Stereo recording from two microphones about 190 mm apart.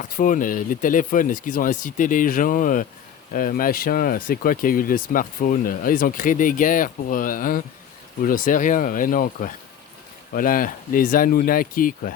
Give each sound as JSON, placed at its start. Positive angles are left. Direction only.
{"t": 0.1, "sound": "speech", "side_deg": 45}